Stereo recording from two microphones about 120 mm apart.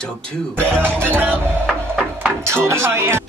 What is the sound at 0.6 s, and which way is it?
Speech, 20° right (ahead or behind).